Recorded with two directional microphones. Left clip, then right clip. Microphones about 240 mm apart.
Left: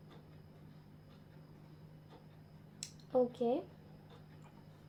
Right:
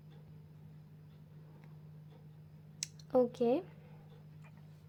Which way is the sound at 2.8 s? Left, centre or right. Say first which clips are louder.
Right 2 dB; right.